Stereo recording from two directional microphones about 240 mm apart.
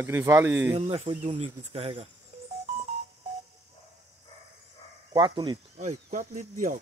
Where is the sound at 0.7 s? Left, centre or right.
Right.